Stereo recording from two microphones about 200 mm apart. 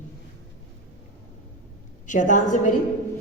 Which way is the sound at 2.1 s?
40° left (ahead or behind).